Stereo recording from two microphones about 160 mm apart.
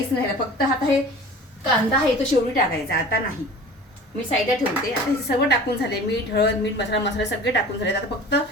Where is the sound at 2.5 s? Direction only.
70° left (ahead or behind).